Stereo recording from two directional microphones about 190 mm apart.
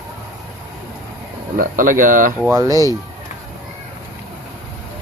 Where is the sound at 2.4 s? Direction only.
15° right (ahead or behind).